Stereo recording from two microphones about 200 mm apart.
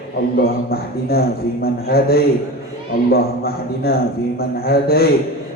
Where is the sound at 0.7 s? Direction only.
50° left (ahead or behind).